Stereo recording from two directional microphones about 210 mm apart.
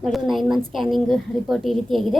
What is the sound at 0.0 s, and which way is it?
A woman's voice, centre (ahead or behind).